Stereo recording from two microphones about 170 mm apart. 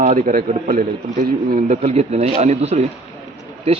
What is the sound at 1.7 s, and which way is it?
Speech, 40° right (ahead or behind).